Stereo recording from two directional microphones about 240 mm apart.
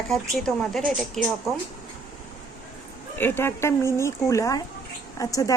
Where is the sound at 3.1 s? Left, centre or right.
Centre.